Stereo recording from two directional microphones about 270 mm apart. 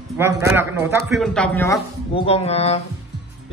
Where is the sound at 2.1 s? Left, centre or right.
Left.